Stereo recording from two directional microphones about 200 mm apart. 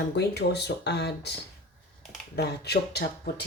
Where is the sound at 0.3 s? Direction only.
55° left (ahead or behind).